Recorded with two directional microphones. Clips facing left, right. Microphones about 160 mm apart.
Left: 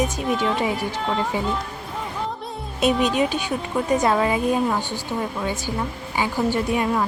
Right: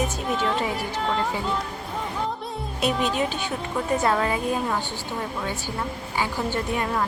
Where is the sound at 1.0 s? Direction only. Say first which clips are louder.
Right 1 dB; centre (ahead or behind).